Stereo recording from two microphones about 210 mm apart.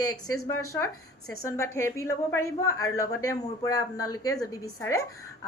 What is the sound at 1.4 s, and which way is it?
A woman's voice, 15° left (ahead or behind).